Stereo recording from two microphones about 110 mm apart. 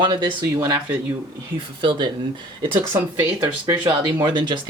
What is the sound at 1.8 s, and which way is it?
Speech, 45° right (ahead or behind).